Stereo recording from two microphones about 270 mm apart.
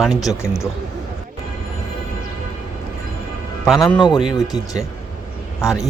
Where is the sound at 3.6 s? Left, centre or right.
Centre.